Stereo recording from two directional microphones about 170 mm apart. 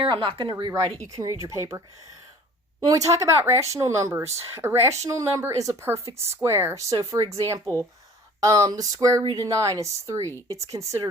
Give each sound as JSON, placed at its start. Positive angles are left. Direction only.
{"t": 0.0, "sound": "speech", "side_deg": -30}
{"t": 1.0, "sound": "speech", "side_deg": -20}
{"t": 2.8, "sound": "speech", "side_deg": -20}
{"t": 7.6, "sound": "speech", "side_deg": 15}
{"t": 8.4, "sound": "speech", "side_deg": -20}